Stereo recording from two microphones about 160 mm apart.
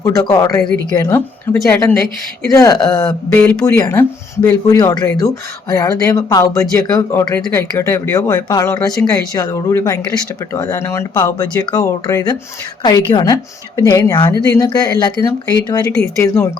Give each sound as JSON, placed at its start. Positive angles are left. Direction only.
{"t": 0.0, "sound": "speech", "side_deg": 20}
{"t": 0.6, "sound": "a woman's voice", "side_deg": 5}
{"t": 0.9, "sound": "speech", "side_deg": 25}